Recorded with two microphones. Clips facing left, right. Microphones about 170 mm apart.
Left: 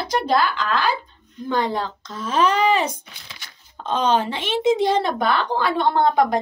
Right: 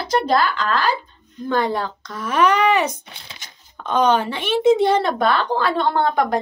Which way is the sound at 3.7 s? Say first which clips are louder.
Right 2 dB; 25° left (ahead or behind).